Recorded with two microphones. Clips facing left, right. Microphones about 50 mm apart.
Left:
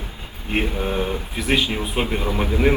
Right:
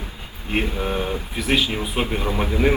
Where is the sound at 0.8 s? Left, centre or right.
Centre.